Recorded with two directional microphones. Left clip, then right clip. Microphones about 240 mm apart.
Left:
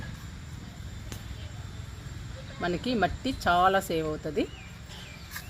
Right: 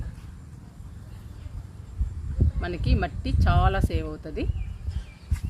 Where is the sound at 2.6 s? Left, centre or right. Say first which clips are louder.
Left 4 dB; left.